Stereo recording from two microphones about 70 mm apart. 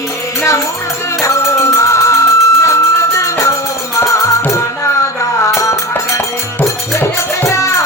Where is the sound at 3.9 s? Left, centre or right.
Left.